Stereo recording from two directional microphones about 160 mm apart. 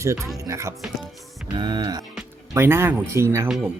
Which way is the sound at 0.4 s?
20° right (ahead or behind).